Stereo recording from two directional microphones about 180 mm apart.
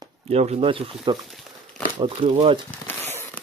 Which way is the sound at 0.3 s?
35° right (ahead or behind).